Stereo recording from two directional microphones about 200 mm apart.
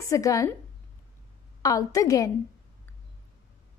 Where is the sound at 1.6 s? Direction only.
15° left (ahead or behind).